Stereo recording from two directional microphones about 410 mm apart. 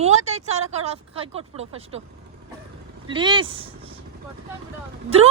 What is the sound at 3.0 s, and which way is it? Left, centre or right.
Speech, centre.